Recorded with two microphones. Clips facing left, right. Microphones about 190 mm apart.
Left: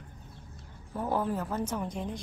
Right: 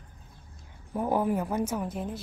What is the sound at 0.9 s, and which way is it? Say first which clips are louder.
A woman's voice: right 4 dB; 15° right (ahead or behind).